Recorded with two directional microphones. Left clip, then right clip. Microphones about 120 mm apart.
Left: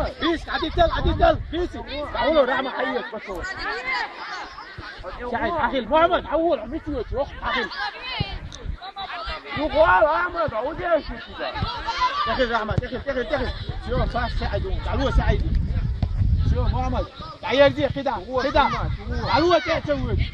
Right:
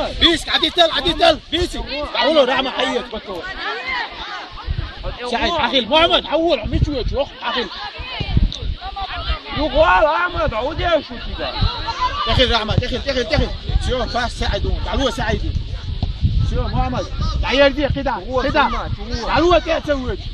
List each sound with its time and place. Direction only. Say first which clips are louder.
0.0 s speech: right 8 dB; 5° left (ahead or behind)
3.6 s a sound: right 3 dB; 40° right (ahead or behind)
5.6 s speech: right 4 dB; centre (ahead or behind)
7.6 s a sound: right 1 dB; 25° left (ahead or behind)
9.1 s a sound: right 4 dB; 40° left (ahead or behind)
9.8 s a man's voice: right 3 dB; 30° right (ahead or behind)
12.4 s speech: right 6 dB; 5° left (ahead or behind)
12.7 s speech: right 6 dB; 15° right (ahead or behind)
13.8 s speech: right 5 dB; 10° left (ahead or behind); by 15.3 s 25° left (ahead or behind)
16.6 s speech: right 5 dB; 40° left (ahead or behind)
19.3 s speech: right 4 dB; 35° left (ahead or behind)